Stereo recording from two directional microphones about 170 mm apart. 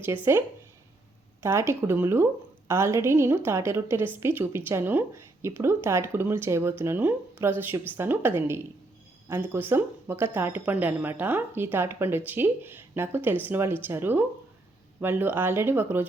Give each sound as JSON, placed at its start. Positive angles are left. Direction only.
{"t": 0.3, "sound": "a woman's voice", "side_deg": -15}